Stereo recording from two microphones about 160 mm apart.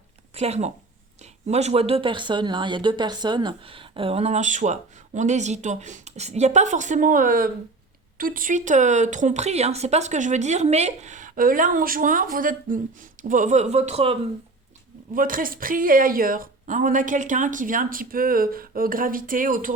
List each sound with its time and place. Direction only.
0.3 s speech: 40° right (ahead or behind)
15.1 s a woman's voice: 60° right (ahead or behind)